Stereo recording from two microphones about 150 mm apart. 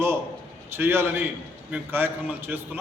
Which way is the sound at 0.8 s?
15° right (ahead or behind).